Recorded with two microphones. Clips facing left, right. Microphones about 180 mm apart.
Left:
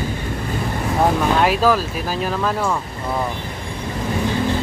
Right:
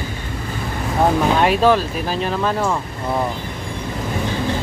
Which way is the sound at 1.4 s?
Centre (ahead or behind).